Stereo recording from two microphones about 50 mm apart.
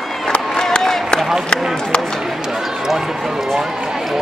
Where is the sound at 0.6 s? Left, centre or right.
Centre.